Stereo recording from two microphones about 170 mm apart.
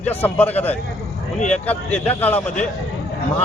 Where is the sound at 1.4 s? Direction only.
45° left (ahead or behind).